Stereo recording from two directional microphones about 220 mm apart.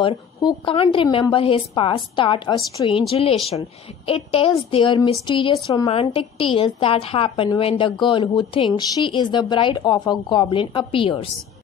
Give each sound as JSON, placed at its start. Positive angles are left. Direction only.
{"t": 0.0, "sound": "a woman's voice", "side_deg": 20}